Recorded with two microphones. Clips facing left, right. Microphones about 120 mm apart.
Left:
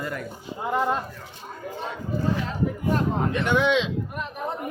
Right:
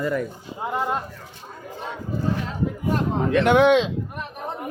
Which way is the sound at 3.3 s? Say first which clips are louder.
Right 8 dB; 70° right (ahead or behind).